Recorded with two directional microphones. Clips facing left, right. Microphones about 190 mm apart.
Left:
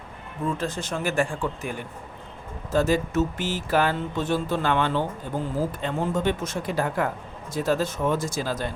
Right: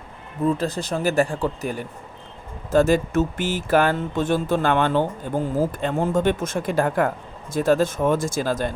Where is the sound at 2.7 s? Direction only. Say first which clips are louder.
Right 5 dB; 50° right (ahead or behind).